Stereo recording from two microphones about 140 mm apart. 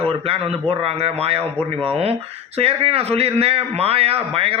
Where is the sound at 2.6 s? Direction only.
45° right (ahead or behind).